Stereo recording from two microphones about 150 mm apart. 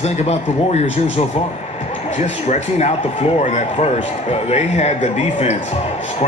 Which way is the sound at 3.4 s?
45° left (ahead or behind).